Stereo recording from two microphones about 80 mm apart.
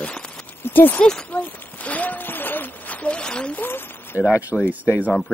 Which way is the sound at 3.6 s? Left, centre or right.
Left.